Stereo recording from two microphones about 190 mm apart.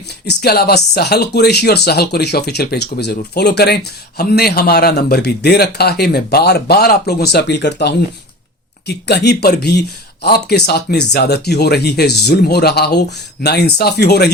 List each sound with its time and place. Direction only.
0.3 s speech: 60° left (ahead or behind)